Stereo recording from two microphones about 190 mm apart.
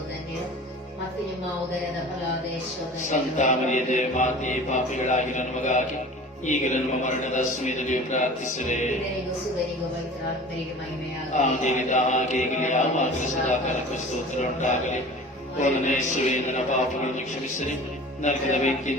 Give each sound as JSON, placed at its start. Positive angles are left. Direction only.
{"t": 3.1, "sound": "mantra", "side_deg": 40}
{"t": 11.6, "sound": "mantra", "side_deg": 40}
{"t": 14.6, "sound": "mantra", "side_deg": 40}
{"t": 18.2, "sound": "mantra", "side_deg": 40}